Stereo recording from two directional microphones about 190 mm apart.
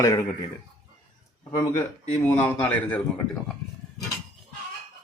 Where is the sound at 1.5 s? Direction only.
15° left (ahead or behind).